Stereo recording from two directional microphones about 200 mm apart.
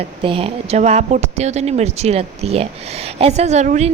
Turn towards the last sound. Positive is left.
turn(degrees=-35)  # may be behind; listen again after turning